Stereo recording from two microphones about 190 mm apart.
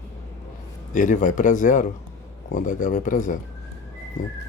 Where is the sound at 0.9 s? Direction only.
45° left (ahead or behind).